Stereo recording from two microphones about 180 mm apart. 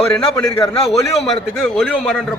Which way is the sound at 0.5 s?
30° left (ahead or behind).